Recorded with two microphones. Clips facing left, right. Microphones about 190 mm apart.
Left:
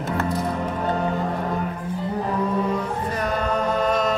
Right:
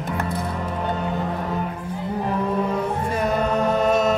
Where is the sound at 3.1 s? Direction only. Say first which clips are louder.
Right 2 dB; 25° right (ahead or behind).